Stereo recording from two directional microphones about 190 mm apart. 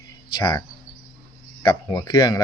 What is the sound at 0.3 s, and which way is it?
Speech, 20° left (ahead or behind).